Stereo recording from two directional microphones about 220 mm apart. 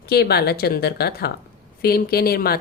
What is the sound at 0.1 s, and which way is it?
A woman's voice, 45° left (ahead or behind).